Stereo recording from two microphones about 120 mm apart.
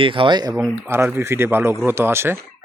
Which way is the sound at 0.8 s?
20° right (ahead or behind).